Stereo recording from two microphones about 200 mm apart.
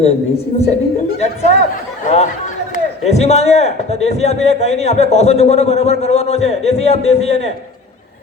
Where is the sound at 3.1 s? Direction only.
35° left (ahead or behind).